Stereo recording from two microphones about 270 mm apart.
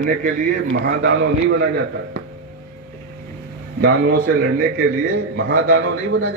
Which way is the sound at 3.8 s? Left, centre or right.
Right.